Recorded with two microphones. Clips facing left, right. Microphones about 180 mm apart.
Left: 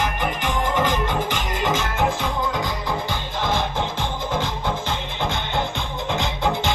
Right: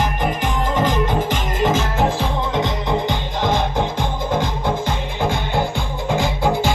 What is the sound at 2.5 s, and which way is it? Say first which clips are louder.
Music: right 5 dB; 25° right (ahead or behind).